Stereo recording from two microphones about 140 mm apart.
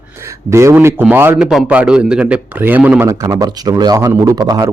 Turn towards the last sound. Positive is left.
turn(degrees=-25)  # may be behind; listen again after turning